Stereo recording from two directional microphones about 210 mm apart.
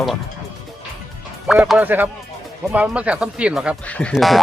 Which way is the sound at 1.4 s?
Centre (ahead or behind).